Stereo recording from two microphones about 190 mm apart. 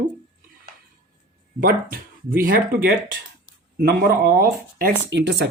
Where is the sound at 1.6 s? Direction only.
50° right (ahead or behind).